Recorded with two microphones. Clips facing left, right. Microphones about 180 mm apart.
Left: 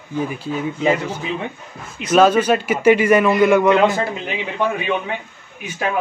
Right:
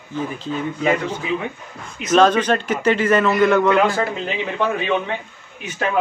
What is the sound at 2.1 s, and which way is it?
A man's voice, 10° left (ahead or behind).